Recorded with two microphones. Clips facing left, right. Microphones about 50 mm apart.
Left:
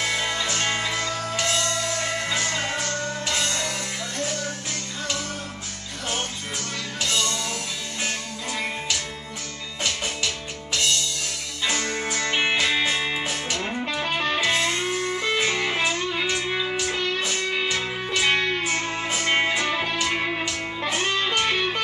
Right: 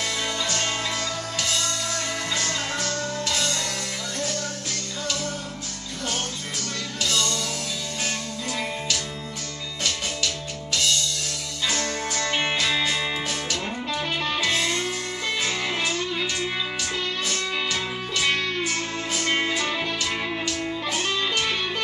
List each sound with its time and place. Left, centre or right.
0.0 s music: centre
7.0 s music: centre
9.8 s music: centre